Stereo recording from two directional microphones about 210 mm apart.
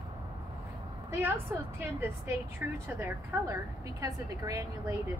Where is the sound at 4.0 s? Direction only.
15° right (ahead or behind).